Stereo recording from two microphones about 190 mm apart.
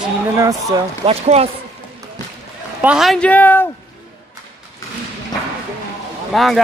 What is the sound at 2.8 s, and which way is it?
Speech, 5° right (ahead or behind).